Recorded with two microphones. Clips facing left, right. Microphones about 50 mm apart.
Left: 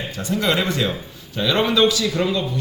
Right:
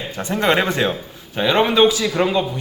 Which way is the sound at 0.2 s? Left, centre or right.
Right.